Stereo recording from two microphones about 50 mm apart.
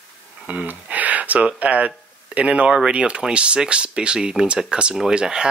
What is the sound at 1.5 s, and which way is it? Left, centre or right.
Speech, right.